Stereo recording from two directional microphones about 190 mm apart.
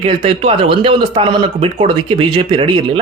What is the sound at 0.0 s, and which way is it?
Speech, 30° right (ahead or behind).